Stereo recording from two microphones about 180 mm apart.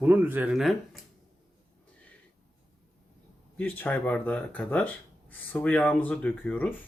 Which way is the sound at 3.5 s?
10° left (ahead or behind).